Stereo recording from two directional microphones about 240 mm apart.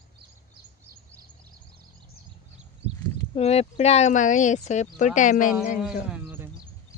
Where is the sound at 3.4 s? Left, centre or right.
Left.